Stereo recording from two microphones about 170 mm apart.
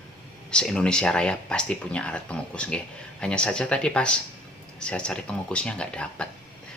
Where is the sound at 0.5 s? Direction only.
5° left (ahead or behind).